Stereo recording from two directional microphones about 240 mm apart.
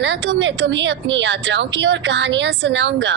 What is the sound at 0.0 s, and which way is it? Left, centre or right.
A woman's voice, right.